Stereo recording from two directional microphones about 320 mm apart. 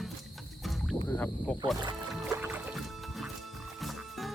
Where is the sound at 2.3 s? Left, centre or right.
Centre.